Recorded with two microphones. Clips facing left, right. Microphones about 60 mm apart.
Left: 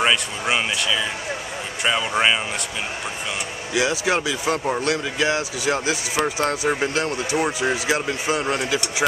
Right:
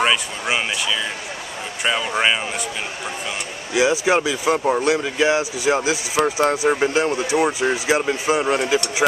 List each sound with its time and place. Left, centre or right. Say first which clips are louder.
0.0 s speech: right 1 dB; centre
3.7 s speech: right 4 dB; right
4.6 s speech: right 5 dB; centre
5.2 s speech: right 4 dB; right